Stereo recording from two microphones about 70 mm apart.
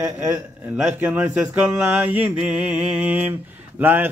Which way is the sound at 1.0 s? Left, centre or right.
Right.